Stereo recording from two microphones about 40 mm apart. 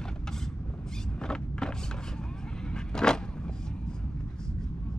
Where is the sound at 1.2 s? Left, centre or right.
Centre.